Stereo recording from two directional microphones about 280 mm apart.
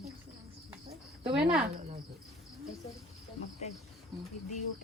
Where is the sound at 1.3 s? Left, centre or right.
Centre.